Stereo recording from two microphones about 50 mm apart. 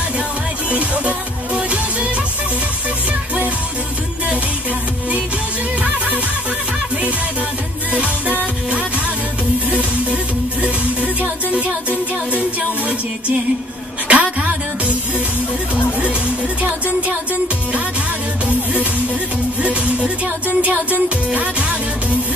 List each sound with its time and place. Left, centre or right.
0.7 s music: right
14.1 s music: right
18.5 s music: right